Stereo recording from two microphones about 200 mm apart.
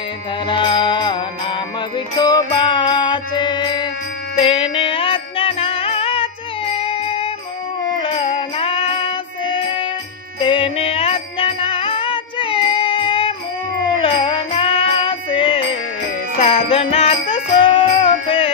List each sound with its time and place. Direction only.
0.5 s music: 25° left (ahead or behind)
2.1 s music: 20° left (ahead or behind)